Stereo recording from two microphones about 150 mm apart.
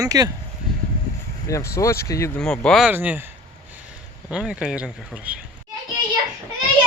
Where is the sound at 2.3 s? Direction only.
5° left (ahead or behind).